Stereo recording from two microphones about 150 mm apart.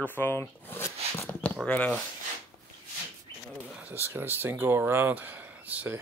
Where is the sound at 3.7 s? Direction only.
10° right (ahead or behind).